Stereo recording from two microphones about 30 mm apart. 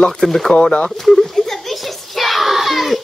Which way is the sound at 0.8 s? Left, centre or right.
Centre.